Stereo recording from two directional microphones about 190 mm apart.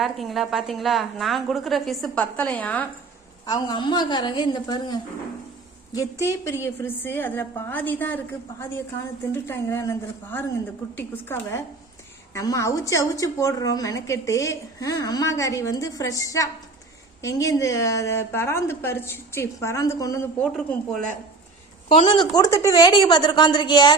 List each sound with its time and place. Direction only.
0.0 s a woman's voice: centre (ahead or behind)
3.4 s a woman's voice: 20° left (ahead or behind)
20.4 s a woman's voice: 5° left (ahead or behind)
21.8 s a woman's voice: 30° left (ahead or behind)